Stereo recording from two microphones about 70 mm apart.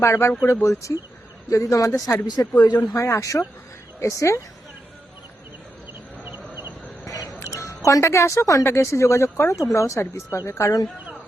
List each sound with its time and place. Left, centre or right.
0.0 s speech: left
2.2 s speech: left
2.6 s speech: left
2.9 s speech: left
7.0 s a sound: left
7.4 s a sound: left
7.9 s speech: left